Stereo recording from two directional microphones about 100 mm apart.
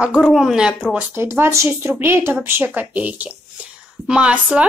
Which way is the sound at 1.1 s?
25° right (ahead or behind).